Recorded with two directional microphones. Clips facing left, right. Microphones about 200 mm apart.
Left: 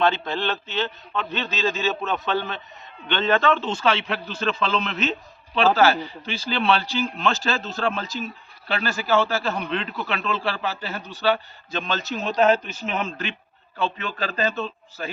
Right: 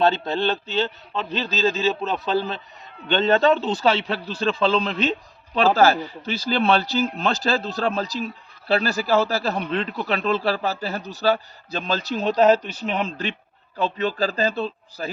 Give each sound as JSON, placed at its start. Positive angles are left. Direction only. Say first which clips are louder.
{"t": 0.0, "sound": "a man's voice", "louder": "right 2 dB", "side_deg": -40}
{"t": 13.7, "sound": "a man's voice", "louder": "right 4 dB", "side_deg": -40}